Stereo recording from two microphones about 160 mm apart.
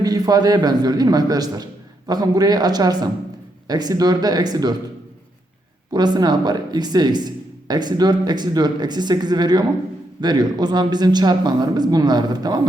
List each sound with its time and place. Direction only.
0.0 s speech: 25° right (ahead or behind)
5.9 s speech: 25° right (ahead or behind)